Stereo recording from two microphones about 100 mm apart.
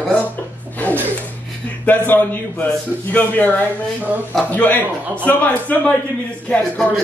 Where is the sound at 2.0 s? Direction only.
20° left (ahead or behind).